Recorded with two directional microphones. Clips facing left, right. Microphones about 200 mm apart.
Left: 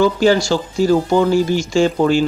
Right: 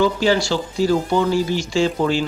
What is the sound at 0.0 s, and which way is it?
Speech, 45° left (ahead or behind).